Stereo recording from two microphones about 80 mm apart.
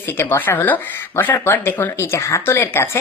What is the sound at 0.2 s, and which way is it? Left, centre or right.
Speech, left.